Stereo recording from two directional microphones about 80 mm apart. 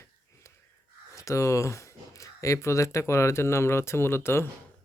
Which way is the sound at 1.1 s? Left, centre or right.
Left.